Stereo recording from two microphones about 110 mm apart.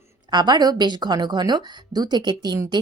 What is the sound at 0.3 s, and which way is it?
Speech, 40° right (ahead or behind).